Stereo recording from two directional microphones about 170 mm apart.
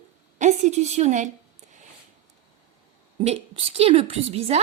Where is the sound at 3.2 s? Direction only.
35° right (ahead or behind).